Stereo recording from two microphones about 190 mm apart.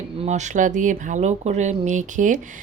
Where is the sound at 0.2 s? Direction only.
40° right (ahead or behind).